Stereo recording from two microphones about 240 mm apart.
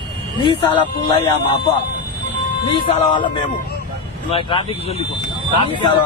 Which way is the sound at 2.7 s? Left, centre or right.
Centre.